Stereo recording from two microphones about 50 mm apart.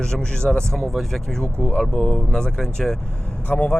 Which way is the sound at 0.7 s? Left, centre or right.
Centre.